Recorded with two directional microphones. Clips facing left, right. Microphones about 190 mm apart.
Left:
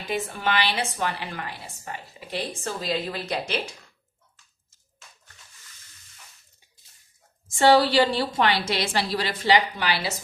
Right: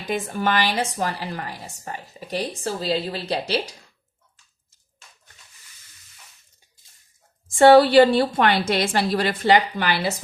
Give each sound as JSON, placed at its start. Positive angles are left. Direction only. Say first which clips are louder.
{"t": 0.1, "sound": "speech", "louder": "right 3 dB", "side_deg": -45}
{"t": 7.4, "sound": "a woman's voice", "louder": "right 6 dB", "side_deg": -55}